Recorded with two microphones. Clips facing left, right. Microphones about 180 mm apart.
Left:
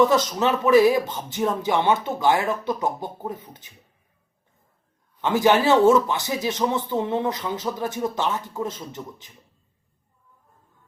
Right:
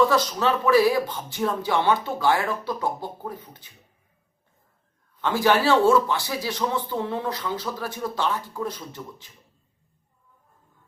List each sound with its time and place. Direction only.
0.0 s speech: 20° left (ahead or behind)
5.2 s speech: 20° left (ahead or behind)